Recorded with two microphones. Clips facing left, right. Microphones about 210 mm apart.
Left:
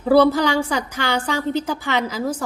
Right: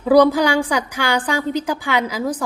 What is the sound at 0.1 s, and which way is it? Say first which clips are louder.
A woman's voice: right 2 dB; 15° right (ahead or behind).